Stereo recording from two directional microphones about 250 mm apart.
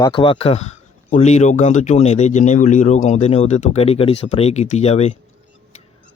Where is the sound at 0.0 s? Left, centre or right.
Centre.